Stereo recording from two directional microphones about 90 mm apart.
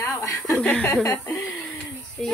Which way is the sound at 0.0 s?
35° left (ahead or behind).